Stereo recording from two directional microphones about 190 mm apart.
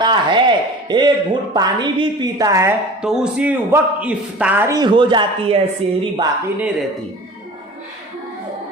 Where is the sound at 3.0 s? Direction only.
5° right (ahead or behind); by 5.6 s 25° right (ahead or behind).